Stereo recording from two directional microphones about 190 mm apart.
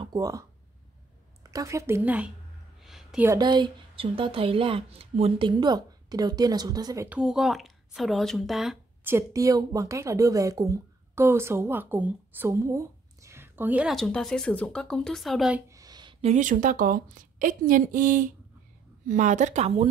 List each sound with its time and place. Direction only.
0.0 s speech: 20° right (ahead or behind)
2.8 s a sound: centre (ahead or behind)
3.3 s speech: 20° right (ahead or behind)
7.1 s speech: 5° right (ahead or behind)
9.1 s a woman's voice: 15° right (ahead or behind); by 15.6 s centre (ahead or behind)
15.7 s a woman's voice: 20° right (ahead or behind); by 19.9 s 35° right (ahead or behind)